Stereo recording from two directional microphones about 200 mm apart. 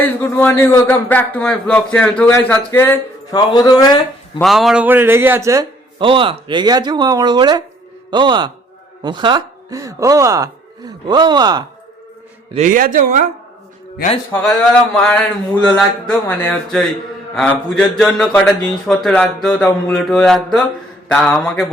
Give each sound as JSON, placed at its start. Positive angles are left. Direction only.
{"t": 0.0, "sound": "a man's voice", "side_deg": 10}
{"t": 3.3, "sound": "a man's voice", "side_deg": 20}
{"t": 4.4, "sound": "speech", "side_deg": 0}
{"t": 12.5, "sound": "a man's voice", "side_deg": -40}
{"t": 14.3, "sound": "a man's voice", "side_deg": 5}